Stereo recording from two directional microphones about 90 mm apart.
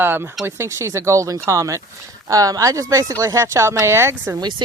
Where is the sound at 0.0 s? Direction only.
25° right (ahead or behind).